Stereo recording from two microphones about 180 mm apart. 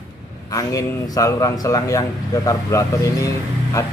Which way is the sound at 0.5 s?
15° left (ahead or behind).